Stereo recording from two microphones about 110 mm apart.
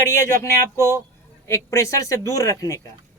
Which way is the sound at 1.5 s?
25° left (ahead or behind).